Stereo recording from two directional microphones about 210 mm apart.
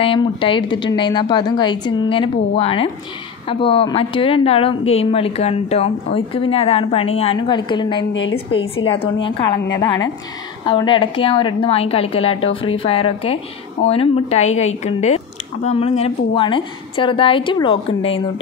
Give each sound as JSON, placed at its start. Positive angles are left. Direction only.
{"t": 0.0, "sound": "a woman's voice", "side_deg": 25}
{"t": 8.1, "sound": "a woman's voice", "side_deg": 65}
{"t": 8.8, "sound": "a woman's voice", "side_deg": 25}